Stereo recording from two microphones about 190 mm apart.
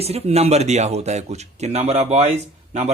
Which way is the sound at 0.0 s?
30° right (ahead or behind).